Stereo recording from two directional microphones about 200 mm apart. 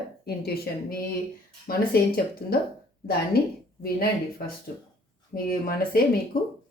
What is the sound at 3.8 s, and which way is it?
A woman's voice, 50° left (ahead or behind).